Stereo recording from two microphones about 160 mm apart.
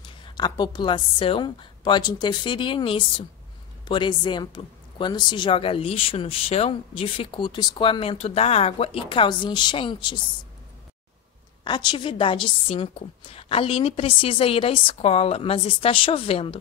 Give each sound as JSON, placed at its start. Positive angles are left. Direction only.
{"t": 0.2, "sound": "a woman's voice", "side_deg": 30}
{"t": 11.6, "sound": "a woman's voice", "side_deg": 30}